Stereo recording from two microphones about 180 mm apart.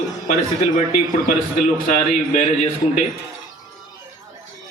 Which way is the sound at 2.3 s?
40° left (ahead or behind).